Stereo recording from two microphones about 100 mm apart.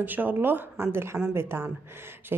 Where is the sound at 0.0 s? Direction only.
20° right (ahead or behind).